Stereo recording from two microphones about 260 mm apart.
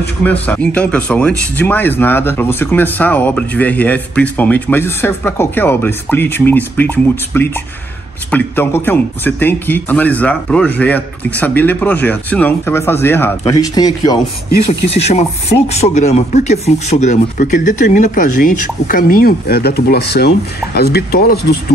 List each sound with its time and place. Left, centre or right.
0.2 s speech: centre; by 21.5 s left